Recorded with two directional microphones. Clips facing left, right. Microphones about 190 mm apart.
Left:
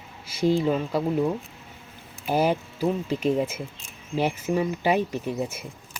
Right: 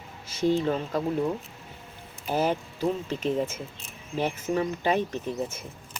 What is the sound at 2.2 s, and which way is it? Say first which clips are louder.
Speech: left 3 dB; 10° left (ahead or behind).